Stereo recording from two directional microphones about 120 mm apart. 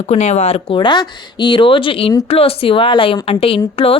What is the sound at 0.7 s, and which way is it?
Speech, 40° left (ahead or behind).